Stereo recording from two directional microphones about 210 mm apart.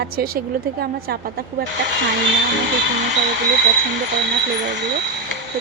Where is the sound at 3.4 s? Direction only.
55° right (ahead or behind).